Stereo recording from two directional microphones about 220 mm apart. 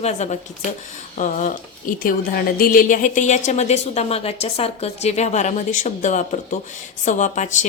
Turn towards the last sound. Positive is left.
turn(degrees=35)  # may be behind; listen again after turning